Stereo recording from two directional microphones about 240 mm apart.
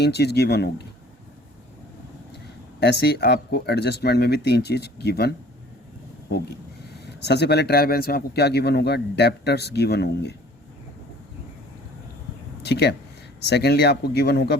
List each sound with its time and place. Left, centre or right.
0.0 s a man's voice: left
2.8 s a man's voice: left
6.9 s a man's voice: left
12.6 s a man's voice: left